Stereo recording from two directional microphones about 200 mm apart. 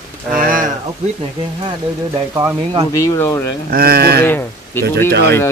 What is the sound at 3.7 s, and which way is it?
Speech, 50° right (ahead or behind).